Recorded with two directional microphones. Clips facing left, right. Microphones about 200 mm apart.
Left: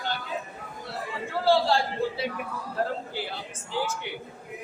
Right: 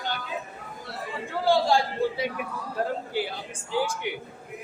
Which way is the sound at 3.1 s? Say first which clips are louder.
Right 4 dB; 15° right (ahead or behind).